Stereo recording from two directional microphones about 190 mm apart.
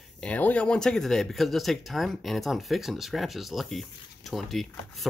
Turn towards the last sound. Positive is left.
turn(degrees=0)  # may be behind; listen again after turning